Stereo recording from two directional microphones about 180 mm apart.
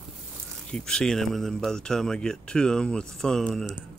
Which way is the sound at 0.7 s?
5° left (ahead or behind).